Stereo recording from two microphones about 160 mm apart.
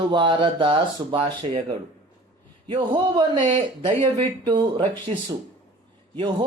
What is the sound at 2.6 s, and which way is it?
Speech, 30° right (ahead or behind).